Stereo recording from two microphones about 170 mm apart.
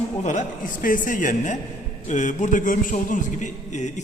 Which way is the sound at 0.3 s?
50° left (ahead or behind).